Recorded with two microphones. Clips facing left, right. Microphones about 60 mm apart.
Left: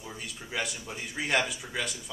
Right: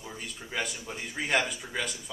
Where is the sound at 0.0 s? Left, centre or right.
Centre.